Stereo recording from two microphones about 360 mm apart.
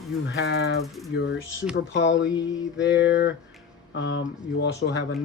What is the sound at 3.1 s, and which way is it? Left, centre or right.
Speech, left.